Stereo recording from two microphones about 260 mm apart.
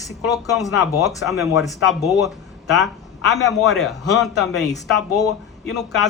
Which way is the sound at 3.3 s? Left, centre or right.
Centre.